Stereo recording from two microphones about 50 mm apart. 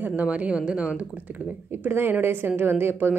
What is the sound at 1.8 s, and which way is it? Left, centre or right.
A woman's voice, right.